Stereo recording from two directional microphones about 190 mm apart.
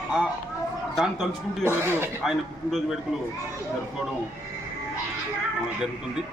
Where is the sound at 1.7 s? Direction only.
10° right (ahead or behind).